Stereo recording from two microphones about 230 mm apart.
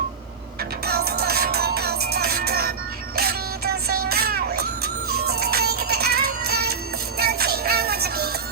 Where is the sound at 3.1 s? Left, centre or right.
Right.